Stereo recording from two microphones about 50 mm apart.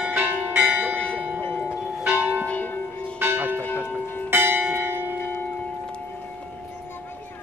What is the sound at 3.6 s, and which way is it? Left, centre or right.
Church bell, left.